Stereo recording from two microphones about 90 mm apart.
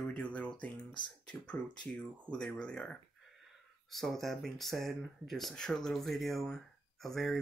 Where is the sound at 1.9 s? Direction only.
10° left (ahead or behind).